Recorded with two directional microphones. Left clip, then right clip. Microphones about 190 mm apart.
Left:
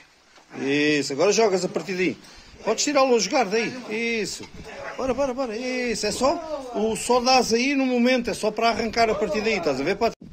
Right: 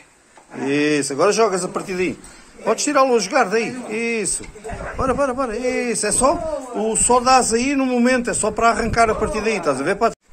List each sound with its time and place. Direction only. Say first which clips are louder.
0.7 s a man's voice: right 3 dB; 25° left (ahead or behind)
7.3 s a man's voice: right 4 dB; centre (ahead or behind)
7.7 s a man's voice: right 3 dB; 25° left (ahead or behind)